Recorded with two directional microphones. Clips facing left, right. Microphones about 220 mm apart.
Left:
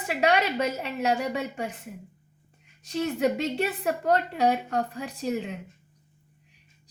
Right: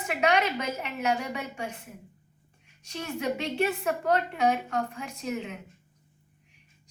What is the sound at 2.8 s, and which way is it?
Speech, 35° left (ahead or behind).